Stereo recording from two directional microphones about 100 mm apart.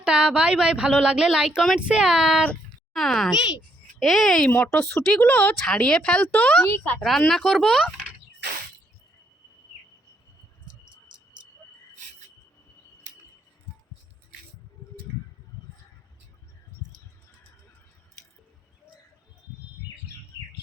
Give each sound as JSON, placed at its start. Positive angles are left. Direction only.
{"t": 0.0, "sound": "a child's voice", "side_deg": -10}
{"t": 7.2, "sound": "speech", "side_deg": 5}